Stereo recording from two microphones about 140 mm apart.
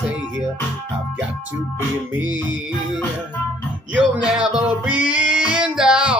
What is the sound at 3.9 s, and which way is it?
Music, 10° right (ahead or behind).